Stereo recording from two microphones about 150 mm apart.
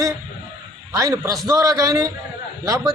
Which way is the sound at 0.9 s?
20° right (ahead or behind).